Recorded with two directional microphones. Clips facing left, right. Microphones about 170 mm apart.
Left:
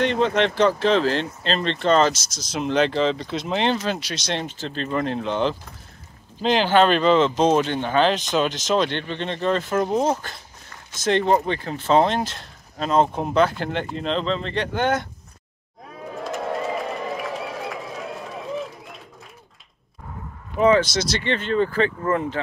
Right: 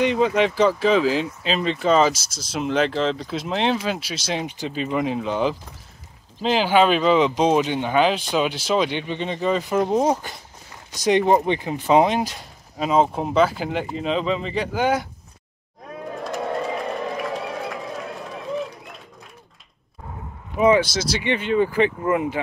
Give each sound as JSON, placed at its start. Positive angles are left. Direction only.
{"t": 0.0, "sound": "speech", "side_deg": -5}
{"t": 16.3, "sound": "a sound", "side_deg": 0}
{"t": 20.5, "sound": "speech", "side_deg": -10}